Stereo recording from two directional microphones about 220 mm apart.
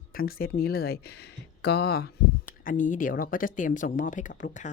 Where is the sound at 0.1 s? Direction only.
40° left (ahead or behind).